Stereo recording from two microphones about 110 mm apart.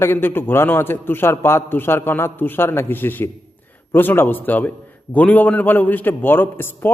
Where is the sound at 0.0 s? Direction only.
20° left (ahead or behind).